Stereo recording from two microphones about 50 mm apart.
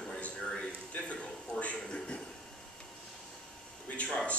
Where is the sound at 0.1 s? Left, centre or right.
Left.